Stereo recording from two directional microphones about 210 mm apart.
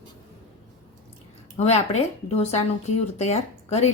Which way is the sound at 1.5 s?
30° left (ahead or behind).